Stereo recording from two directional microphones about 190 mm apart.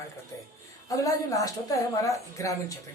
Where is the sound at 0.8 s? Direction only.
15° left (ahead or behind).